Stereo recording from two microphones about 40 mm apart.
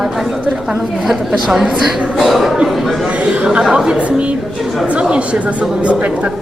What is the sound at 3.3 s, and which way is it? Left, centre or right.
Speech, right.